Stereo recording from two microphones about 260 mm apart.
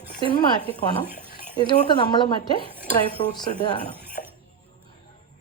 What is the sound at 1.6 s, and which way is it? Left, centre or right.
A woman's voice, centre.